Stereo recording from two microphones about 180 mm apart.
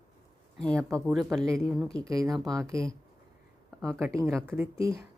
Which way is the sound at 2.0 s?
20° right (ahead or behind).